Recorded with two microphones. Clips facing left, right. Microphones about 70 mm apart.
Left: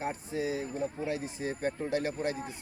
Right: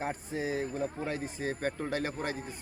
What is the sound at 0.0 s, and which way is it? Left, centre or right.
Speech, right.